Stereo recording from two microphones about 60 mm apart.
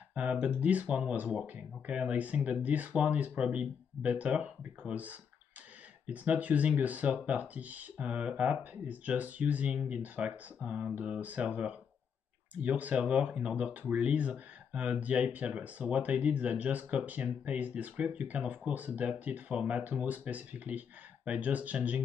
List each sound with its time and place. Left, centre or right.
0.1 s speech: right